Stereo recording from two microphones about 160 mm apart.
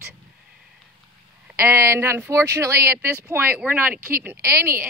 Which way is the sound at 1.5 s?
15° right (ahead or behind).